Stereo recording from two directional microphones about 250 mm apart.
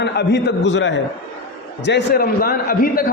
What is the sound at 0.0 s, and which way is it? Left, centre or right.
A man's voice, left.